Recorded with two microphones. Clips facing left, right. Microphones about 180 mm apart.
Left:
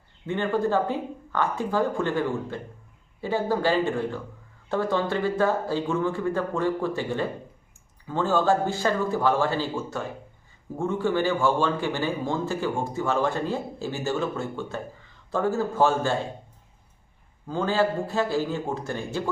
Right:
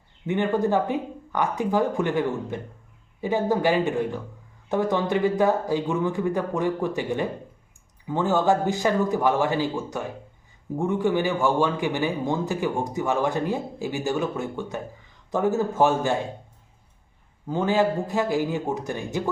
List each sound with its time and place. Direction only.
0.3 s a man's voice: 20° right (ahead or behind)
17.4 s a man's voice: 20° right (ahead or behind)